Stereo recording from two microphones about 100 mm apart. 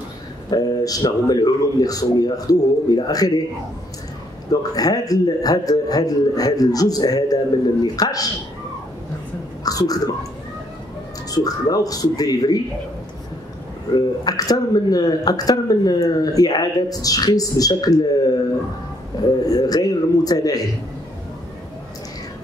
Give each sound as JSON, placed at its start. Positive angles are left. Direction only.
{"t": 0.5, "sound": "speech", "side_deg": 40}
{"t": 4.5, "sound": "speech", "side_deg": 40}
{"t": 9.6, "sound": "a sound", "side_deg": 40}
{"t": 11.2, "sound": "speech", "side_deg": 40}
{"t": 13.9, "sound": "speech", "side_deg": 40}
{"t": 19.4, "sound": "speech", "side_deg": 40}